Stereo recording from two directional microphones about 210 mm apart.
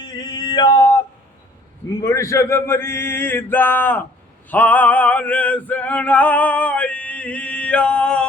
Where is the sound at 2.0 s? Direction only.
15° left (ahead or behind).